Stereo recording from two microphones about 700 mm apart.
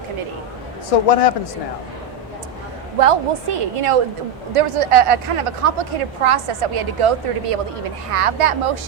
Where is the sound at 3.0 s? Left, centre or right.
Right.